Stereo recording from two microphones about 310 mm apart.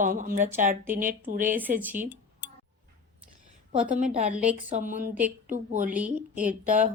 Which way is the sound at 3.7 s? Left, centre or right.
Right.